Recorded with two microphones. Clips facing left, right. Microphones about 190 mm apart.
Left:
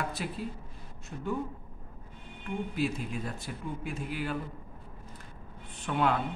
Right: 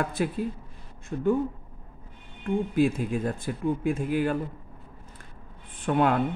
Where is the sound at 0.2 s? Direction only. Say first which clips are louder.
Right 9 dB; 50° right (ahead or behind).